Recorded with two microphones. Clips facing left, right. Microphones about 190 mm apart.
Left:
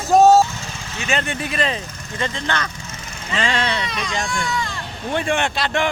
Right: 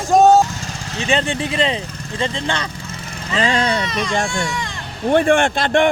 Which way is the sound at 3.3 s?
35° right (ahead or behind).